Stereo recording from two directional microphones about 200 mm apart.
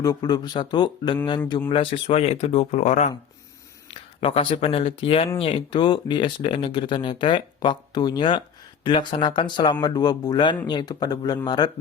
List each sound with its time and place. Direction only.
0.0 s speech: 20° left (ahead or behind); by 3.1 s 35° left (ahead or behind)
4.2 s speech: 25° left (ahead or behind)